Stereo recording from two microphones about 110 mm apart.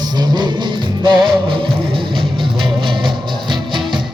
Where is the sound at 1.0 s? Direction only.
45° right (ahead or behind).